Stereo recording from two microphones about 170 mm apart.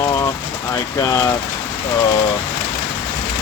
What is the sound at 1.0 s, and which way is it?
Speech, 20° left (ahead or behind).